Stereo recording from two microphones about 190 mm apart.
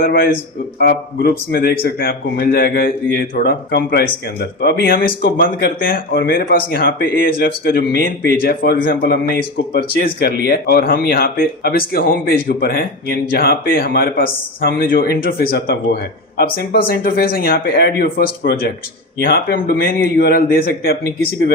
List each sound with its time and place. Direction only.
0.0 s a man's voice: 50° left (ahead or behind)